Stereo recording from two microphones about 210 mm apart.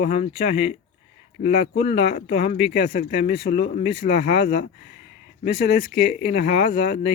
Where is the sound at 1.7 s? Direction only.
50° left (ahead or behind).